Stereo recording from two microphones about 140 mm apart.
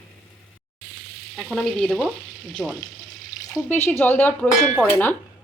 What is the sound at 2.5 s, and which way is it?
Speech, 5° left (ahead or behind).